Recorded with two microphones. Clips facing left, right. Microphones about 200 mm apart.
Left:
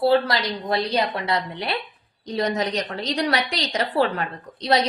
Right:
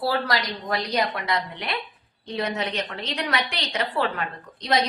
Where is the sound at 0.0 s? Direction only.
25° left (ahead or behind).